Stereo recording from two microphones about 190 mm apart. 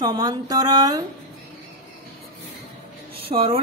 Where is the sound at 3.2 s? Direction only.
30° right (ahead or behind).